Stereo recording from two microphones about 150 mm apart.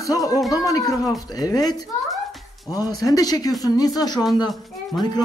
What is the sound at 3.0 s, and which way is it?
Speech, 25° left (ahead or behind).